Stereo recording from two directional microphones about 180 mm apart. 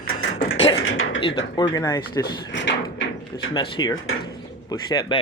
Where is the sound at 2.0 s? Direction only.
70° left (ahead or behind).